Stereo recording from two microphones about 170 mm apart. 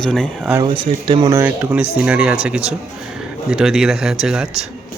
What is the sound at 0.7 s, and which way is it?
Speech, 25° right (ahead or behind).